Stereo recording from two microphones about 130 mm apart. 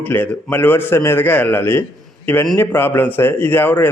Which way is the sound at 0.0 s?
15° left (ahead or behind).